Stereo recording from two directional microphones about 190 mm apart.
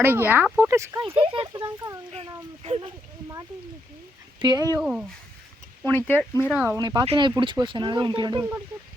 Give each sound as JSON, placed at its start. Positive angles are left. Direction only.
{"t": 0.0, "sound": "speech", "side_deg": -10}
{"t": 1.0, "sound": "speech", "side_deg": -25}
{"t": 2.6, "sound": "speech", "side_deg": -30}
{"t": 4.4, "sound": "speech", "side_deg": -25}
{"t": 4.8, "sound": "speech", "side_deg": -5}
{"t": 5.8, "sound": "speech", "side_deg": 10}
{"t": 6.5, "sound": "speech", "side_deg": -5}
{"t": 6.7, "sound": "speech", "side_deg": -25}